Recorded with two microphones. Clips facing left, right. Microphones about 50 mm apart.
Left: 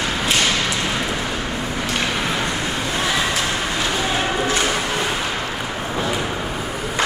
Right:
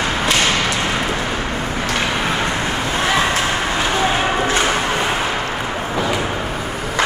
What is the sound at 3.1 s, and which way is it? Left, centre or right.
Vehicle, right.